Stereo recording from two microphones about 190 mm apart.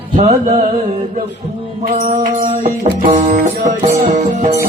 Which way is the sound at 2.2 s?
40° right (ahead or behind).